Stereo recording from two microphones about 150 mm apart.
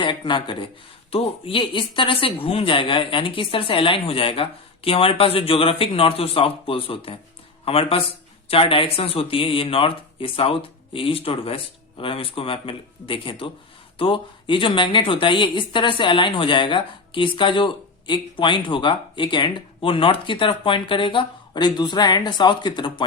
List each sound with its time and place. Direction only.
0.0 s a woman's voice: 30° left (ahead or behind)